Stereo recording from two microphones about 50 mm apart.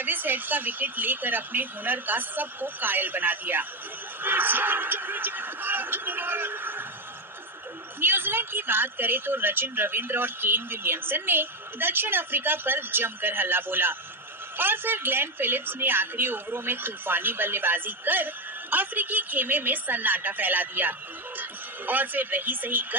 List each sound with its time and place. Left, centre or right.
0.0 s a woman's voice: right
7.9 s a woman's voice: right